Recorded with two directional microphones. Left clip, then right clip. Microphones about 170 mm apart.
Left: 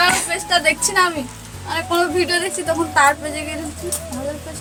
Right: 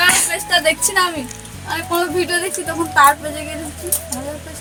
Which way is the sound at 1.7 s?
10° left (ahead or behind).